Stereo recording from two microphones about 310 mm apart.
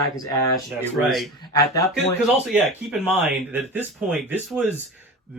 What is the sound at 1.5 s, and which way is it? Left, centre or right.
Speech, centre.